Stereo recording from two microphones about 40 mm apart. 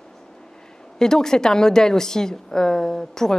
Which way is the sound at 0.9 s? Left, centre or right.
Centre.